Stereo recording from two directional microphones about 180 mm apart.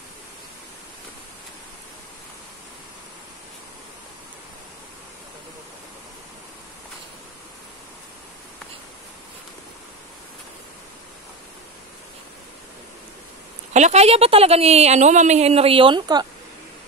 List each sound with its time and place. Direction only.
13.7 s a woman's voice: 40° right (ahead or behind)